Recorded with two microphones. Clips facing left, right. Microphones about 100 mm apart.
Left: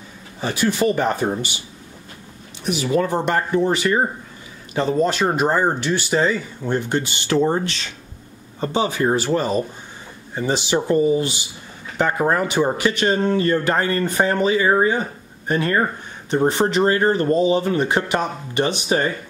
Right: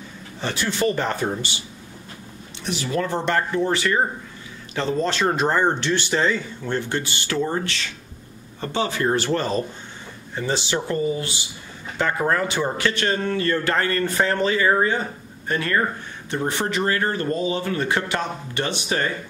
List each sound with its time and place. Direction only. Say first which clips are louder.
0.4 s speech: left 4 dB; 10° left (ahead or behind)
2.6 s speech: left 5 dB; 15° left (ahead or behind)